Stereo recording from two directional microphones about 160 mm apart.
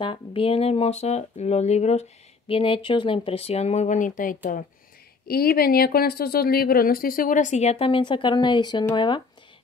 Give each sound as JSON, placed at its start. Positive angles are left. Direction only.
{"t": 0.0, "sound": "speech", "side_deg": 35}
{"t": 5.3, "sound": "speech", "side_deg": 70}